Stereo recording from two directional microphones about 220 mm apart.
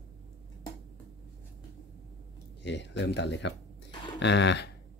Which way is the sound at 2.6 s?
55° left (ahead or behind).